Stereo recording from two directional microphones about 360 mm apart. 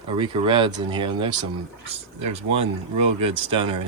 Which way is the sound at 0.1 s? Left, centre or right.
Centre.